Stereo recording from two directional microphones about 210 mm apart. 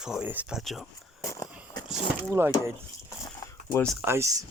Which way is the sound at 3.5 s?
10° left (ahead or behind).